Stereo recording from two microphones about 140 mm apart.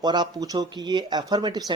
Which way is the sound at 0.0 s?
30° right (ahead or behind).